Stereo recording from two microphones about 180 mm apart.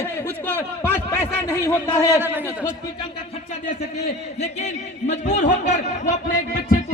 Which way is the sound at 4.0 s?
40° left (ahead or behind).